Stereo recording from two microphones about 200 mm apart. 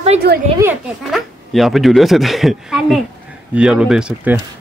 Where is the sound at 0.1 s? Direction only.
35° right (ahead or behind).